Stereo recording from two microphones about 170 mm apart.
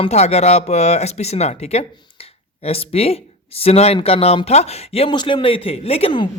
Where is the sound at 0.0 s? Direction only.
40° left (ahead or behind).